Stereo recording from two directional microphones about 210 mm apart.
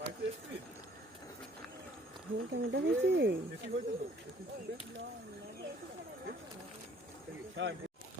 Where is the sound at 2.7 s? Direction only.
55° right (ahead or behind).